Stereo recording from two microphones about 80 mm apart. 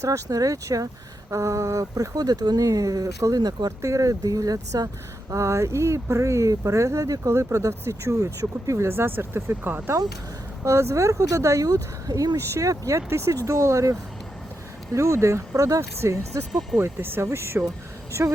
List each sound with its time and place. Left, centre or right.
0.0 s speech: right
3.7 s speech: right
5.3 s speech: right
14.9 s speech: right
16.5 s speech: centre
16.8 s speech: right